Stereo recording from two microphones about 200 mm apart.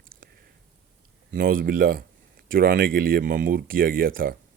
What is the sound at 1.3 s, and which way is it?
Speech, 45° right (ahead or behind).